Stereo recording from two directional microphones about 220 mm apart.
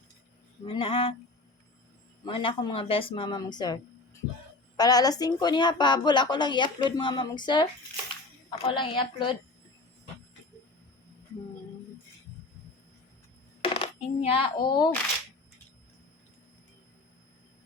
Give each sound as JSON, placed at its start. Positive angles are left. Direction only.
{"t": 0.6, "sound": "speech", "side_deg": 25}
{"t": 2.2, "sound": "speech", "side_deg": 25}
{"t": 4.8, "sound": "speech", "side_deg": 15}
{"t": 13.6, "sound": "coin", "side_deg": 25}
{"t": 14.3, "sound": "speech", "side_deg": 20}